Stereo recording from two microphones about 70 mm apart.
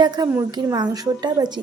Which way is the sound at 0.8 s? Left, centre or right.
Right.